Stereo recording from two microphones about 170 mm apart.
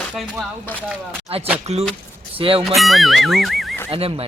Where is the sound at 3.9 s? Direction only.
35° right (ahead or behind).